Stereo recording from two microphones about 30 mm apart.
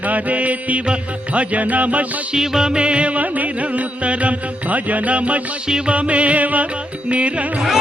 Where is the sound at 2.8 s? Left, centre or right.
Right.